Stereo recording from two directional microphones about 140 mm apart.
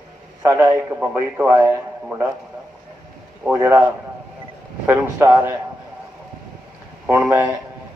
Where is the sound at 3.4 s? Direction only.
15° right (ahead or behind).